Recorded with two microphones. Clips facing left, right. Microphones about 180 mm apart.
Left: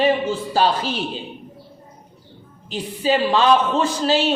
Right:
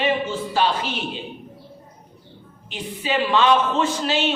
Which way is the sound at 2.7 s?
35° left (ahead or behind).